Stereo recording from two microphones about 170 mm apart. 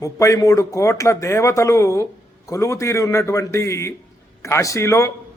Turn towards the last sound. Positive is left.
turn(degrees=15)  # may be behind; listen again after turning